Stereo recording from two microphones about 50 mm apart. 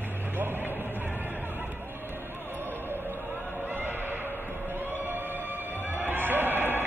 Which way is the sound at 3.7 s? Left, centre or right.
Right.